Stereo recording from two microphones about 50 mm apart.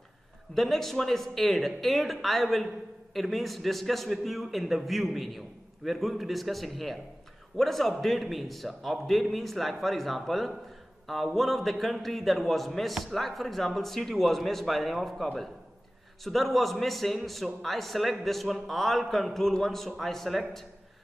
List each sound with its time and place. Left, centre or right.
0.6 s speech: centre